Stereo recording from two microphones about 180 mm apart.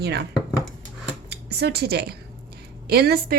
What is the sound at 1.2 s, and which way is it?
Speech, 65° right (ahead or behind).